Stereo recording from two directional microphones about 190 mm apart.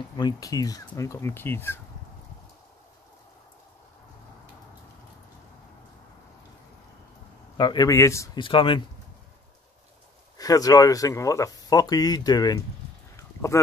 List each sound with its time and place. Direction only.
0.2 s speech: 20° left (ahead or behind)
7.5 s speech: 20° left (ahead or behind)
8.5 s speech: 25° left (ahead or behind)
10.3 s speech: 20° left (ahead or behind)
13.1 s a sound: 15° left (ahead or behind)